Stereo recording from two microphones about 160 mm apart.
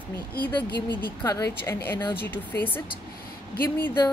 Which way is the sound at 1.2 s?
20° left (ahead or behind).